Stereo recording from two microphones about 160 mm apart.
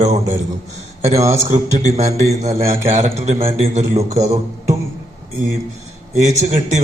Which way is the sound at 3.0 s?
45° right (ahead or behind).